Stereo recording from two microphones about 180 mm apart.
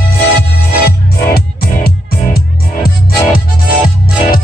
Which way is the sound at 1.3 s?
60° left (ahead or behind).